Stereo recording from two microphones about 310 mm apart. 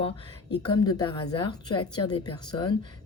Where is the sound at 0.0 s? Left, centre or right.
Centre.